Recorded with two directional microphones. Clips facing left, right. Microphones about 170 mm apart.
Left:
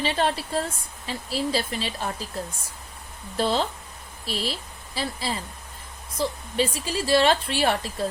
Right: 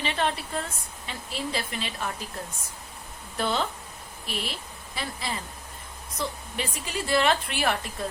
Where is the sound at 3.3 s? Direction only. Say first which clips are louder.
Left 4 dB; 30° left (ahead or behind).